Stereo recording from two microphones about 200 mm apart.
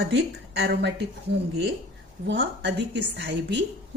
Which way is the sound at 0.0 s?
60° right (ahead or behind).